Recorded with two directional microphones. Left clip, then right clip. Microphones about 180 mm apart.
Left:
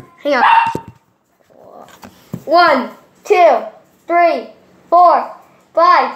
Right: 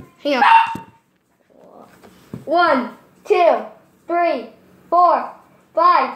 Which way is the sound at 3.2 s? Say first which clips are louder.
Left 5 dB; 15° left (ahead or behind).